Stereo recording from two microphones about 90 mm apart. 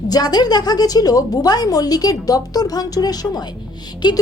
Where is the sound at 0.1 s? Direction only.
50° left (ahead or behind).